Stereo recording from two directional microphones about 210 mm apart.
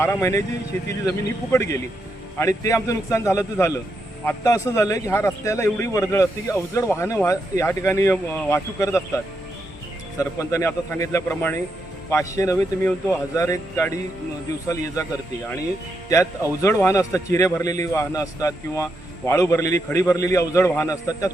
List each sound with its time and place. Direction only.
0.0 s a man's voice: 15° left (ahead or behind)
1.5 s a man's voice: 15° left (ahead or behind)
16.0 s a man's voice: 15° left (ahead or behind)